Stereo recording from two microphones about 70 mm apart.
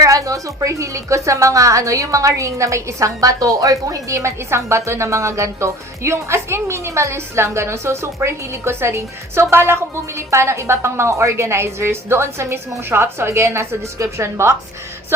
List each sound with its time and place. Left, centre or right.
0.0 s a woman's voice: right